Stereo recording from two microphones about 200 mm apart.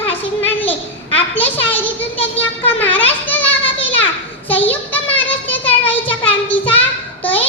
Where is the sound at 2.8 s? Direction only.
10° left (ahead or behind).